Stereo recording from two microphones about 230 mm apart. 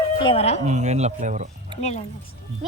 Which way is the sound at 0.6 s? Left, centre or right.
Right.